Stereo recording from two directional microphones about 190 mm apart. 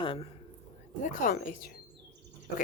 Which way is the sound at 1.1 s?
45° left (ahead or behind).